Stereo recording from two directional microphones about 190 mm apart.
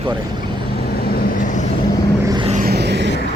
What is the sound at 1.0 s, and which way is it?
Vehicle, 45° left (ahead or behind).